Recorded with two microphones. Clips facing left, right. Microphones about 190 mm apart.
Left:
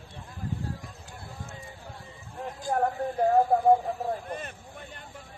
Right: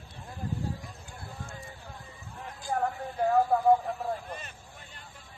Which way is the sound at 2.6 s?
45° left (ahead or behind).